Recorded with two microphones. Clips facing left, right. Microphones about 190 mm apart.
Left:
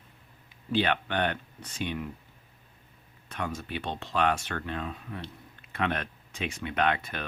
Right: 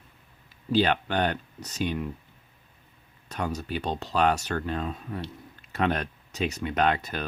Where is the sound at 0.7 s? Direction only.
35° right (ahead or behind).